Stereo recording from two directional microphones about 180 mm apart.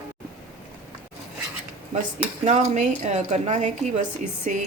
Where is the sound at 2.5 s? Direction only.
40° right (ahead or behind).